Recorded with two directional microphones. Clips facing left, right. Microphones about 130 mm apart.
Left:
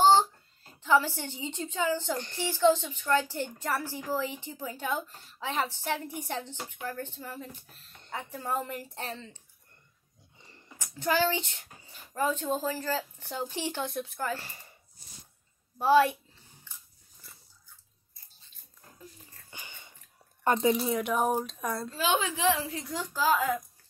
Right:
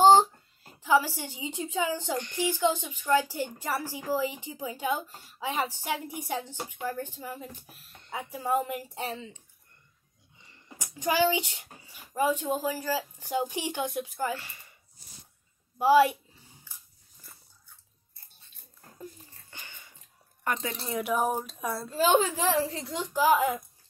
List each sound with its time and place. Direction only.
0.7 s a woman's voice: 10° right (ahead or behind)
10.3 s a sound: 35° left (ahead or behind)
10.8 s a woman's voice: 15° right (ahead or behind)
14.3 s speech: 35° left (ahead or behind)
15.8 s a woman's voice: 10° right (ahead or behind)
16.7 s biting: 10° right (ahead or behind)
19.5 s a sound: 15° left (ahead or behind)
20.4 s a woman's voice: 25° left (ahead or behind)
20.7 s speech: 5° left (ahead or behind)
21.9 s a child's voice: 40° right (ahead or behind); by 23.6 s 25° right (ahead or behind)